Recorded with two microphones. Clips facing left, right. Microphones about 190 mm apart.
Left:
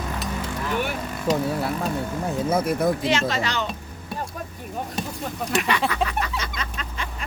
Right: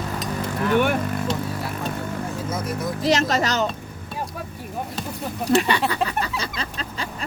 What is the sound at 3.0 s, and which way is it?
Speech, 40° right (ahead or behind).